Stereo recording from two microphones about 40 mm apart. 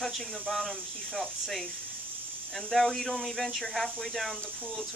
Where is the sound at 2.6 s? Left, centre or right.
Centre.